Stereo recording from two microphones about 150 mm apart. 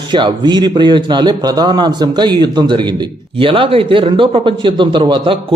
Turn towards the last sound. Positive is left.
turn(degrees=-35)  # may be behind; listen again after turning